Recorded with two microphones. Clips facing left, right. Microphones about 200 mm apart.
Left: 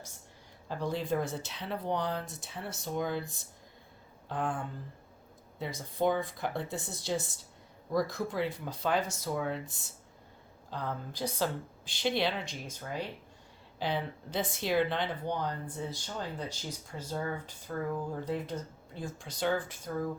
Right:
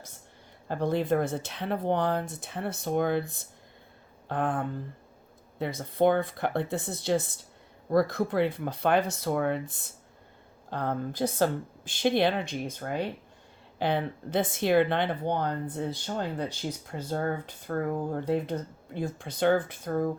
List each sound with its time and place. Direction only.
0.7 s speech: 55° right (ahead or behind)